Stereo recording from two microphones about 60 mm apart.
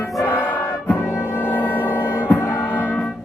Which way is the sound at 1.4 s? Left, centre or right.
Left.